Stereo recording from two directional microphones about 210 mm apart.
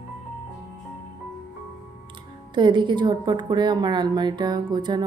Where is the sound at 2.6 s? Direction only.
20° right (ahead or behind).